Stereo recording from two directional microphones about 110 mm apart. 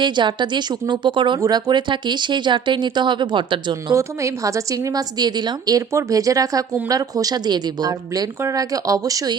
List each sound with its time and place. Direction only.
0.0 s speech: 45° right (ahead or behind)
3.9 s a woman's voice: 30° right (ahead or behind)